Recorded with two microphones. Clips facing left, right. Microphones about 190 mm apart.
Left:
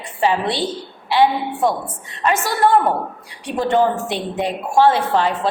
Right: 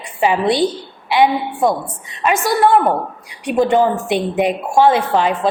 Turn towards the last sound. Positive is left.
turn(degrees=-15)  # may be behind; listen again after turning